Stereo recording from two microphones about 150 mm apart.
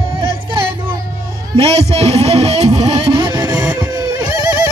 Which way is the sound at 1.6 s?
45° right (ahead or behind).